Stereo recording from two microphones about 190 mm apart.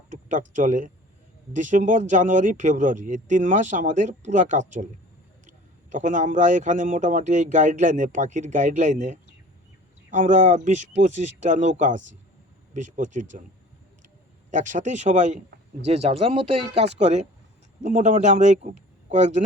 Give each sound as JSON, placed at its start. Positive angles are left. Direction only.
{"t": 0.1, "sound": "speech", "side_deg": -40}
{"t": 14.5, "sound": "a man's voice", "side_deg": -40}